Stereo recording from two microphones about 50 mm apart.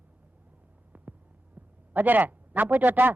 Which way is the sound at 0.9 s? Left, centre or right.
Right.